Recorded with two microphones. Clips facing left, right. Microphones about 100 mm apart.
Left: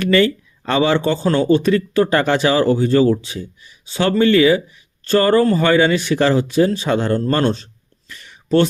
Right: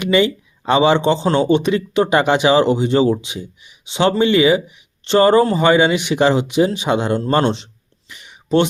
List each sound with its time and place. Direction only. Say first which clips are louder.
0.0 s speech: left 1 dB; 15° right (ahead or behind)